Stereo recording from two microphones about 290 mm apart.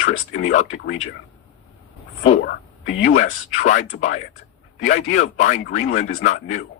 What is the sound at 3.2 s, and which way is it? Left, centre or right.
Speech, left.